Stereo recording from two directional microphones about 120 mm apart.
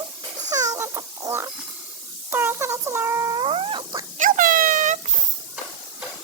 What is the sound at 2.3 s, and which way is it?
Cat, 20° right (ahead or behind).